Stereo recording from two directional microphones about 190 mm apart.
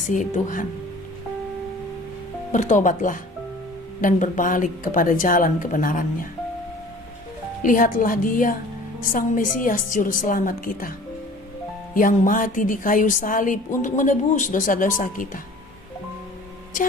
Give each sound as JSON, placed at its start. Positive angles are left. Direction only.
{"t": 0.1, "sound": "a woman's voice", "side_deg": 40}
{"t": 2.5, "sound": "a woman's voice", "side_deg": 40}
{"t": 7.6, "sound": "a woman's voice", "side_deg": 45}
{"t": 11.9, "sound": "a woman's voice", "side_deg": 45}